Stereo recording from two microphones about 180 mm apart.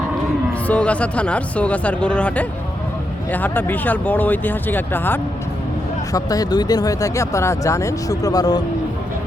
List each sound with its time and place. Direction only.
0.7 s speech: 5° left (ahead or behind)